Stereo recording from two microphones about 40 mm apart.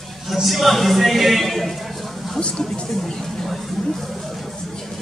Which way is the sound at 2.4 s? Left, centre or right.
Left.